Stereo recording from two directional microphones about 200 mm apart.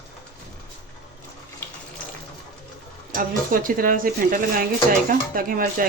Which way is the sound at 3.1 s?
45° right (ahead or behind).